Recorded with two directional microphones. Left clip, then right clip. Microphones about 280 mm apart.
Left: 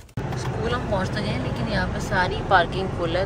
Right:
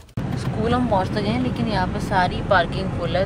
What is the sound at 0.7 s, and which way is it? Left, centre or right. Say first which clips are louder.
Speech: right 6 dB; centre.